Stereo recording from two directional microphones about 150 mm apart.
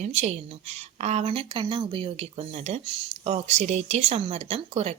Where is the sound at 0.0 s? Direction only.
50° right (ahead or behind).